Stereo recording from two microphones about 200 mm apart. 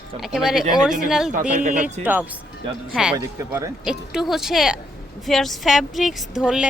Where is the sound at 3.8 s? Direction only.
5° right (ahead or behind).